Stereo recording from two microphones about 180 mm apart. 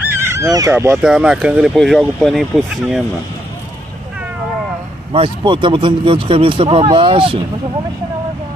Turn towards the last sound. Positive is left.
turn(degrees=-30)  # may be behind; listen again after turning